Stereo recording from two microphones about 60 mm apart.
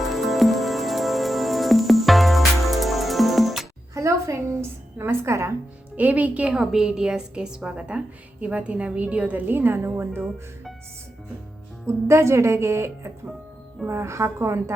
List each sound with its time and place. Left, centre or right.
0.0 s music: centre
3.9 s a sound: right
4.9 s a woman's voice: right
6.0 s a woman's voice: right
6.6 s a woman's voice: centre; by 9.4 s right
9.5 s a woman's voice: right
11.9 s a woman's voice: right